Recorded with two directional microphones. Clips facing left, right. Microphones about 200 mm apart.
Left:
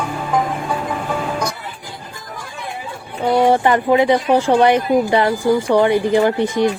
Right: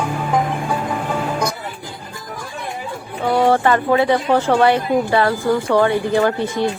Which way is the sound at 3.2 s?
15° left (ahead or behind).